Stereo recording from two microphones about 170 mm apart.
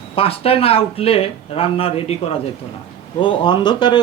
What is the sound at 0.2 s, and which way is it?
Speech, 35° left (ahead or behind).